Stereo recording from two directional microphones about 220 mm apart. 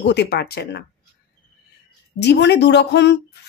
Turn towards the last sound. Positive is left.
turn(degrees=50)  # may be behind; listen again after turning